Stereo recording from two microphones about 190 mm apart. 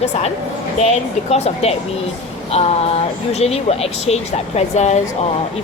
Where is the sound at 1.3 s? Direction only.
35° left (ahead or behind).